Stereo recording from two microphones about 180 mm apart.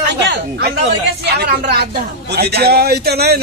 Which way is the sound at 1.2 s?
65° right (ahead or behind).